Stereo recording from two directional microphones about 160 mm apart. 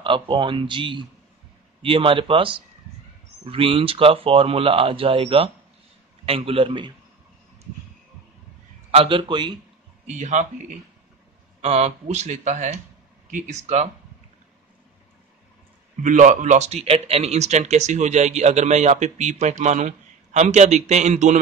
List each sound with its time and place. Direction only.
0.0 s speech: 30° right (ahead or behind)
8.9 s speech: 35° right (ahead or behind)
10.0 s a man's voice: 45° right (ahead or behind)
16.0 s a man's voice: 50° right (ahead or behind)